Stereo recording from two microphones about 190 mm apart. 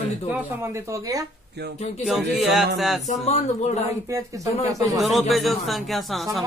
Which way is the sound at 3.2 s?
35° left (ahead or behind).